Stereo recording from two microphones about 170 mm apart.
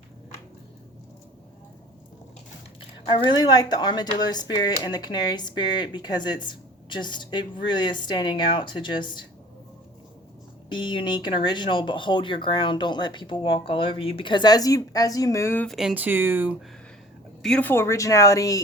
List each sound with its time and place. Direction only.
3.0 s speech: 30° left (ahead or behind)
10.7 s speech: 25° left (ahead or behind)
15.6 s speech: centre (ahead or behind)
17.4 s speech: 5° left (ahead or behind)